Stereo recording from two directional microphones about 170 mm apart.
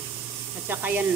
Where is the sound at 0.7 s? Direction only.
10° right (ahead or behind).